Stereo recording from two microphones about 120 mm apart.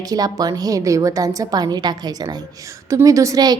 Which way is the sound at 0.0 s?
30° right (ahead or behind).